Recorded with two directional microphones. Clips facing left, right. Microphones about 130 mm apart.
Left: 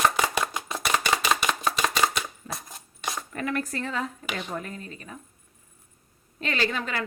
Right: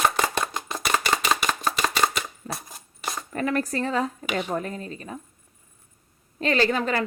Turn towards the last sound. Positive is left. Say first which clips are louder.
# right 6 dB
turn(degrees=-40)  # may be behind; listen again after turning